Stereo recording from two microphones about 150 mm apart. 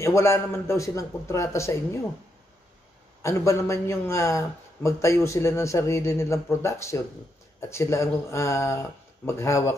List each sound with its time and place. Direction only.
0.0 s a man's voice: 20° left (ahead or behind)
3.2 s a man's voice: 20° left (ahead or behind)